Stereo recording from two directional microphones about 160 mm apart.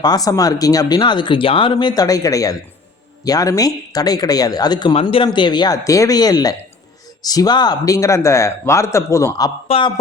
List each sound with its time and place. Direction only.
0.0 s speech: 25° left (ahead or behind)
9.6 s a man's voice: 35° left (ahead or behind)